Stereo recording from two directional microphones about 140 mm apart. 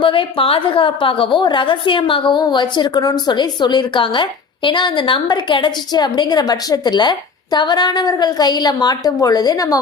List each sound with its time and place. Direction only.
0.0 s a woman's voice: 40° left (ahead or behind)